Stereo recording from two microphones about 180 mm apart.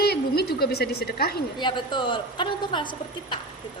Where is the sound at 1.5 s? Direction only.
25° left (ahead or behind).